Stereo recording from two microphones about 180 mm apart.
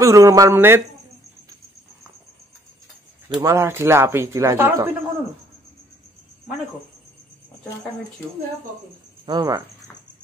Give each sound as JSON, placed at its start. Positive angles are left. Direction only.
{"t": 0.0, "sound": "speech", "side_deg": -20}
{"t": 3.3, "sound": "speech", "side_deg": -15}
{"t": 9.2, "sound": "speech", "side_deg": -25}